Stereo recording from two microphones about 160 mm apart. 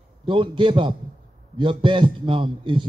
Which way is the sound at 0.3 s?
30° right (ahead or behind).